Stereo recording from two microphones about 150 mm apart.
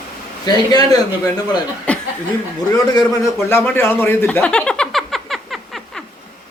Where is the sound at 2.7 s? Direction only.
25° left (ahead or behind).